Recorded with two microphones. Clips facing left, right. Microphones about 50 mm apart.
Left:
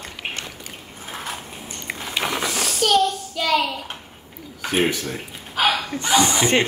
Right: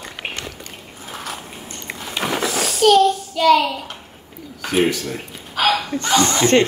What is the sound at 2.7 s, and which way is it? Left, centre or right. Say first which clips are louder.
Child singing: right 6 dB; centre.